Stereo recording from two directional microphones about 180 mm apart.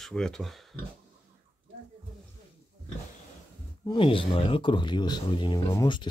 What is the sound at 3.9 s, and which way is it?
Speech, 30° left (ahead or behind).